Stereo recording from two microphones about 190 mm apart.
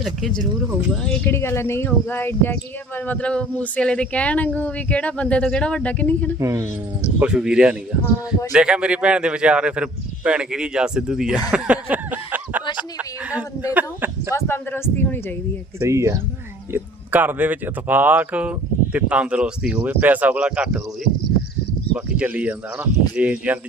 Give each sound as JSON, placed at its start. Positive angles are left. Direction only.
{"t": 0.0, "sound": "speech", "side_deg": 0}
{"t": 1.0, "sound": "speech", "side_deg": 10}
{"t": 6.4, "sound": "speech", "side_deg": -15}
{"t": 7.2, "sound": "speech", "side_deg": -5}
{"t": 11.5, "sound": "a sound", "side_deg": -5}
{"t": 13.0, "sound": "speech", "side_deg": -5}
{"t": 14.3, "sound": "speech", "side_deg": 10}
{"t": 15.8, "sound": "speech", "side_deg": -15}